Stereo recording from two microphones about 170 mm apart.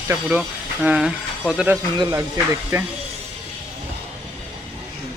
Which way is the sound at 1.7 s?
20° right (ahead or behind).